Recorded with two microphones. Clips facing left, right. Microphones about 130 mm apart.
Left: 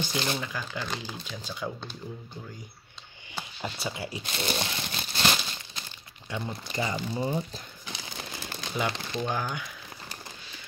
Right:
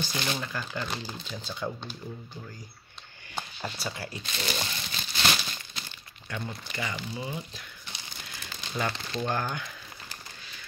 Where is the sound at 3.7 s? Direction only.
20° left (ahead or behind).